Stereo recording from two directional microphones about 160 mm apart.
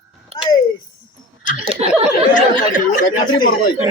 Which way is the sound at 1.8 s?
40° right (ahead or behind).